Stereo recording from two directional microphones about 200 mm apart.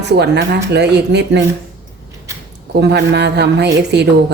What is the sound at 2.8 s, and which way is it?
A woman's voice, 55° right (ahead or behind).